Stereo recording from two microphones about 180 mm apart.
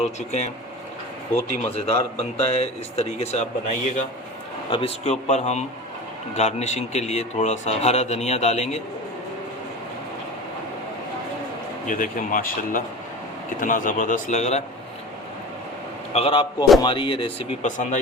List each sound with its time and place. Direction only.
0.0 s speech: 40° left (ahead or behind)
1.6 s speech: 35° left (ahead or behind)
4.7 s a man's voice: 30° left (ahead or behind)
5.3 s speech: 40° left (ahead or behind)
11.9 s speech: 50° left (ahead or behind)
16.1 s a man's voice: 30° left (ahead or behind)
17.6 s speech: 45° left (ahead or behind)